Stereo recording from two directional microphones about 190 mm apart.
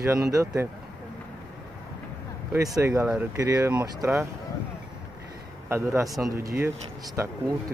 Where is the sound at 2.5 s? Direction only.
15° right (ahead or behind).